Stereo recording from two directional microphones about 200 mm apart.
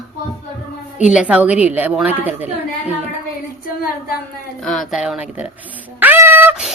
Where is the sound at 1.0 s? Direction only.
5° right (ahead or behind).